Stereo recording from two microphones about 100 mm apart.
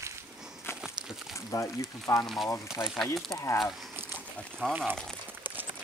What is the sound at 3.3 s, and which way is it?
Speech, 30° left (ahead or behind).